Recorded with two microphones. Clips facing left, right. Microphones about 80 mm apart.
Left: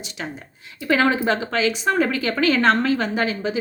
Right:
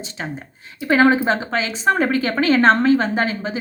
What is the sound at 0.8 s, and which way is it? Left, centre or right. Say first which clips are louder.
Speech: right 4 dB; right.